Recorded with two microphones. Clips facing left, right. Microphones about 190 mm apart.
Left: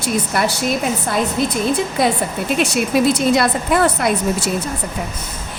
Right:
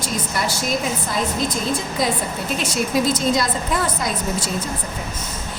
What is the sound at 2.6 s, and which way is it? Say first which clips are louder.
A woman's voice: left 5 dB; 70° left (ahead or behind).